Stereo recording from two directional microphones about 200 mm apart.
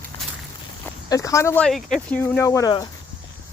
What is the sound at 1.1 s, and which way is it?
Speech, 15° left (ahead or behind).